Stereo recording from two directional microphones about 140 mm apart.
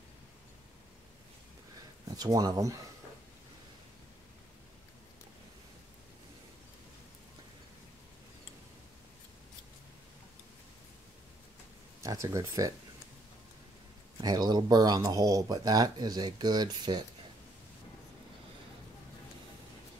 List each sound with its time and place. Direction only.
2.1 s speech: 25° right (ahead or behind)
12.0 s speech: 25° right (ahead or behind)
14.2 s speech: 30° right (ahead or behind)